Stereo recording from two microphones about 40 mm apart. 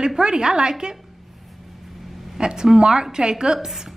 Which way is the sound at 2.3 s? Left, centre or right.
Centre.